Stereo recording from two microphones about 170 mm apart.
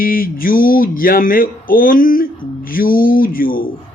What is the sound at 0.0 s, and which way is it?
Speech, 55° left (ahead or behind).